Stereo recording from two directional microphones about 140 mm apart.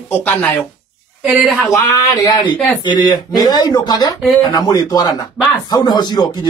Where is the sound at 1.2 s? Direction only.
Centre (ahead or behind).